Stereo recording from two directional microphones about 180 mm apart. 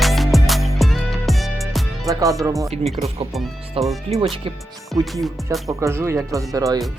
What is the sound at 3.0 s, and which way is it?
Speech, 45° right (ahead or behind).